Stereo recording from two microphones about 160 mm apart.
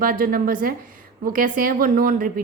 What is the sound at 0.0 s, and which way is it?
A woman's voice, 60° right (ahead or behind).